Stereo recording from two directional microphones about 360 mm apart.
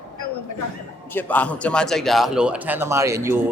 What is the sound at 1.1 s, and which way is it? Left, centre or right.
A man's voice, centre.